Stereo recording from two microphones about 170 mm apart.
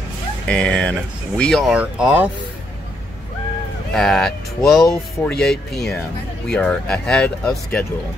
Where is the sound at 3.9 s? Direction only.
5° left (ahead or behind).